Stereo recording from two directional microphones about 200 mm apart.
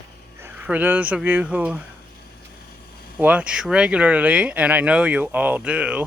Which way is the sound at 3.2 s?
5° right (ahead or behind).